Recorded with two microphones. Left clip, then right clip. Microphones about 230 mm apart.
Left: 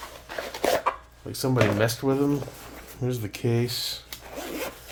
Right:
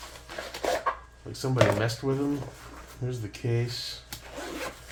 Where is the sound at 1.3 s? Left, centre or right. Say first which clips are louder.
Left 1 dB; left.